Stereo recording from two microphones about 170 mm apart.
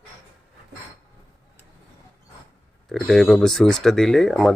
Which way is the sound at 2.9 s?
Centre (ahead or behind).